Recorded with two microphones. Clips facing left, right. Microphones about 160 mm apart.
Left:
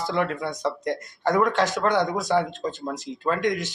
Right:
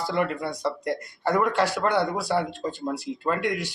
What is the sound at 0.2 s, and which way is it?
Speech, 5° right (ahead or behind).